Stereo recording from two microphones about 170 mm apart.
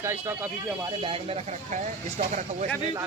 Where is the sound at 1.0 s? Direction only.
35° right (ahead or behind).